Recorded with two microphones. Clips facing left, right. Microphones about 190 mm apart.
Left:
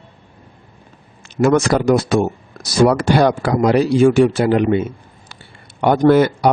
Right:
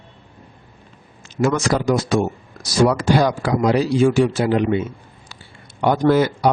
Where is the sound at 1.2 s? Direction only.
60° left (ahead or behind).